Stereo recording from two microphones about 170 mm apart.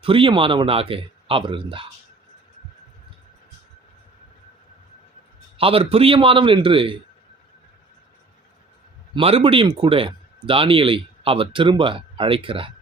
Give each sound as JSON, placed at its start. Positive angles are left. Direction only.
{"t": 0.0, "sound": "speech", "side_deg": -30}
{"t": 5.5, "sound": "speech", "side_deg": -35}
{"t": 9.1, "sound": "speech", "side_deg": -30}